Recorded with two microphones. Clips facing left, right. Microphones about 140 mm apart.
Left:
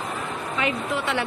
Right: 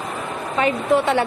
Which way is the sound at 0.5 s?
40° right (ahead or behind).